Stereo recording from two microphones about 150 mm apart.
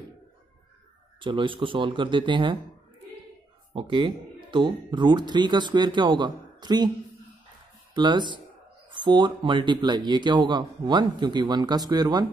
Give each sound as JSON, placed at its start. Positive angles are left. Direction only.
{"t": 1.2, "sound": "speech", "side_deg": -35}
{"t": 3.7, "sound": "speech", "side_deg": -35}
{"t": 7.9, "sound": "speech", "side_deg": -30}